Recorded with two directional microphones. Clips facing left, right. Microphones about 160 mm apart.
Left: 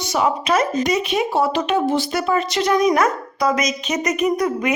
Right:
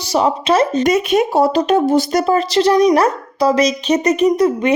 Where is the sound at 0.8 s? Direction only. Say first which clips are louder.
Right 6 dB; 50° right (ahead or behind); by 4.7 s 25° right (ahead or behind).